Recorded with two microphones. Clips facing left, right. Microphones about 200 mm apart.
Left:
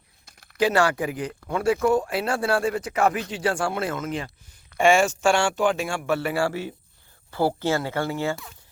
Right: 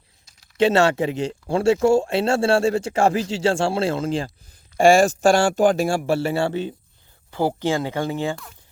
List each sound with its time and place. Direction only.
0.5 s speech: 25° right (ahead or behind)